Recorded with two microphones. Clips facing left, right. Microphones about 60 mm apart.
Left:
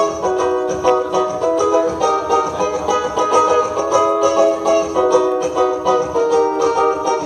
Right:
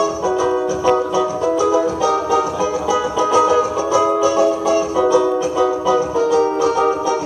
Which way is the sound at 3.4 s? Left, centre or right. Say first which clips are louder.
Left 1 dB; left.